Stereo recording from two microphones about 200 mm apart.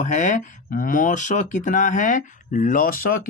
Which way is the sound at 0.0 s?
40° left (ahead or behind).